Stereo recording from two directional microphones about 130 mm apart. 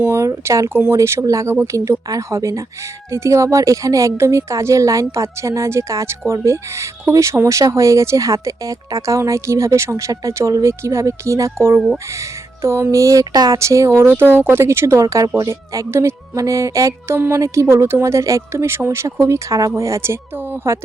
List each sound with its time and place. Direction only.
0.0 s a woman's voice: 20° right (ahead or behind)